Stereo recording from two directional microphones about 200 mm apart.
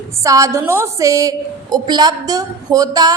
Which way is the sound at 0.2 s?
15° right (ahead or behind).